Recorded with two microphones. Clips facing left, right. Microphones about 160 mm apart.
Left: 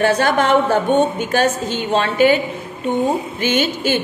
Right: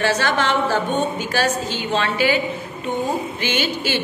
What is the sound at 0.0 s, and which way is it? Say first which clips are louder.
A woman's voice: left 4 dB; 50° left (ahead or behind).